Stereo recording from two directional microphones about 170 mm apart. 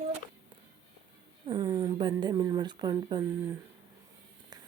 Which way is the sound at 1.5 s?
20° right (ahead or behind).